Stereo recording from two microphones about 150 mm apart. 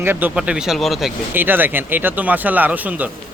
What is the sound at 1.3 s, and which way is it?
Speech, 15° right (ahead or behind).